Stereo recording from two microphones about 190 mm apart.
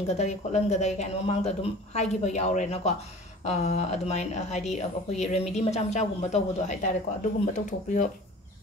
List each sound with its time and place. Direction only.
0.0 s a woman's voice: 35° left (ahead or behind)